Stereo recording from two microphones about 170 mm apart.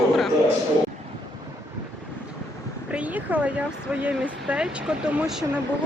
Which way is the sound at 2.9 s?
10° right (ahead or behind).